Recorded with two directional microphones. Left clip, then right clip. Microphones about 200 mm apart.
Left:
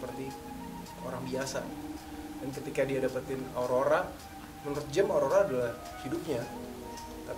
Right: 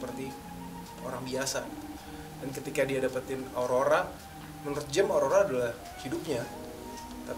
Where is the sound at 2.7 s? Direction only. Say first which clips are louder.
Right 1 dB; 10° left (ahead or behind).